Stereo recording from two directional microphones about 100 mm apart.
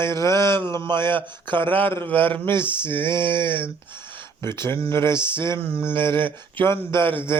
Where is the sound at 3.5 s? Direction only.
20° left (ahead or behind).